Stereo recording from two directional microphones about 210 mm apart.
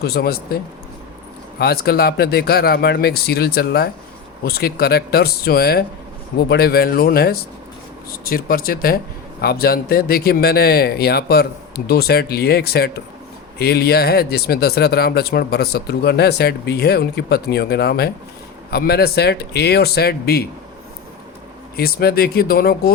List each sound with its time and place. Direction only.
0.0 s speech: 50° left (ahead or behind)
21.8 s speech: 45° left (ahead or behind)